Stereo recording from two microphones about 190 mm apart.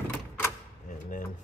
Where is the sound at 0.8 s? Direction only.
45° left (ahead or behind).